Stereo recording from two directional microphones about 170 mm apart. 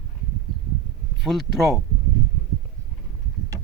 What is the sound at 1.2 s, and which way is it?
Speech, centre (ahead or behind).